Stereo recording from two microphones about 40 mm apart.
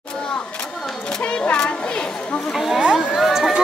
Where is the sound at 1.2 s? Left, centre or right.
Left.